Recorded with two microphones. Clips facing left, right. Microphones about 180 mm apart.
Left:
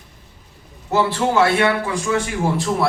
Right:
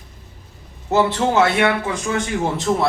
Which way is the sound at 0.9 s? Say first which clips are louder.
Right 1 dB; 20° right (ahead or behind).